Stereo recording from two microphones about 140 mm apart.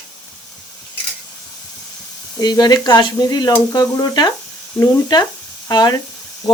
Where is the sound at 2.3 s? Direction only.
30° left (ahead or behind).